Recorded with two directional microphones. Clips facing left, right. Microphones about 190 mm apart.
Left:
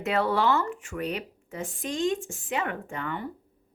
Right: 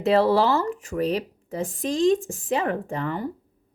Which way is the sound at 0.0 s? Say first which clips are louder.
Right 6 dB; 30° right (ahead or behind).